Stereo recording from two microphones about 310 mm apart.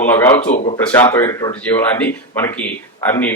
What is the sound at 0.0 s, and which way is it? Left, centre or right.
Speech, centre.